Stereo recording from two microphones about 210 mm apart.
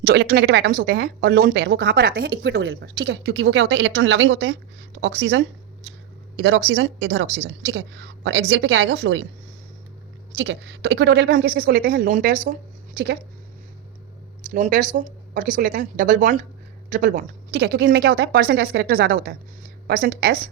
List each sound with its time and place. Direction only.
0.0 s a woman's voice: 50° right (ahead or behind)
10.3 s a woman's voice: 55° right (ahead or behind)
14.5 s speech: 40° right (ahead or behind)
17.5 s a woman's voice: 50° right (ahead or behind)